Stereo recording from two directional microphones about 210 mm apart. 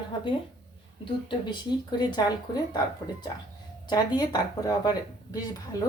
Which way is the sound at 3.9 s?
20° left (ahead or behind).